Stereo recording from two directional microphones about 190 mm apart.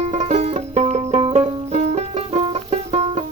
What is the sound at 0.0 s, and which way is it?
Music, 35° right (ahead or behind).